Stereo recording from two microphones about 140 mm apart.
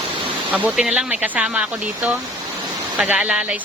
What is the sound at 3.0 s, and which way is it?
Speech, 10° right (ahead or behind).